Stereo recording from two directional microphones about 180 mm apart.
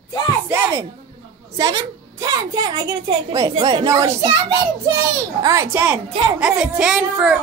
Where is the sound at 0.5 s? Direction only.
15° right (ahead or behind).